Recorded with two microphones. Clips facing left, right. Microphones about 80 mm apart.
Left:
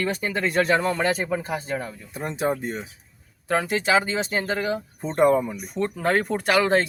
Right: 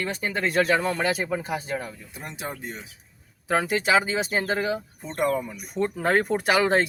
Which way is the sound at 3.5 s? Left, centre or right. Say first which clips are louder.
Even; centre.